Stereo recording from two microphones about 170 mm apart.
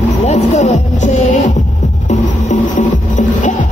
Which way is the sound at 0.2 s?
40° left (ahead or behind).